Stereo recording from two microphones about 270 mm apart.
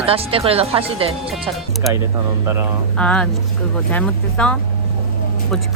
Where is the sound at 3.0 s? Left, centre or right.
Centre.